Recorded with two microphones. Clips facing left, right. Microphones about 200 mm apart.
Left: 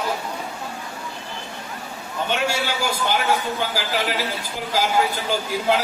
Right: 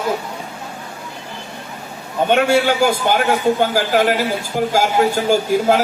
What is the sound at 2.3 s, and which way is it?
A man's voice, 55° right (ahead or behind).